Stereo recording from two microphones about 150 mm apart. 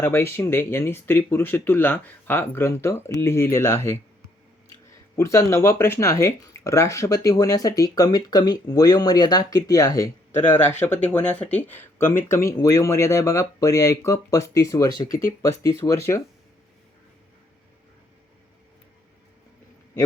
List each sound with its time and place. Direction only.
0.0 s speech: 15° left (ahead or behind)
5.1 s speech: 20° left (ahead or behind)
10.8 s speech: 50° left (ahead or behind)
11.1 s speech: 10° left (ahead or behind)